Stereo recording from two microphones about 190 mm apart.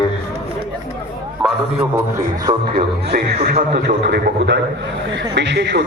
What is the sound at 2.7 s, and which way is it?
A man's voice, 55° right (ahead or behind).